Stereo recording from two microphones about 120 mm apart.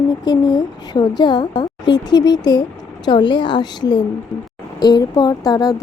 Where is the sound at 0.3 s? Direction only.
35° left (ahead or behind).